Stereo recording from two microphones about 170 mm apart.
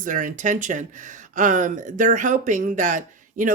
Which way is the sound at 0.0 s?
50° right (ahead or behind).